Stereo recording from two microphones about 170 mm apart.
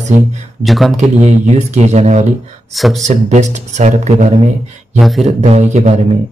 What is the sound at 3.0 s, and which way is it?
Speech, 45° right (ahead or behind).